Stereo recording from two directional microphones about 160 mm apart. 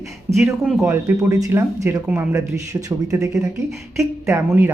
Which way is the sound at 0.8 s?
15° right (ahead or behind).